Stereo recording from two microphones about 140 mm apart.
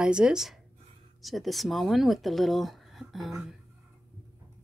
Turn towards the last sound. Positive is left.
turn(degrees=0)  # may be behind; listen again after turning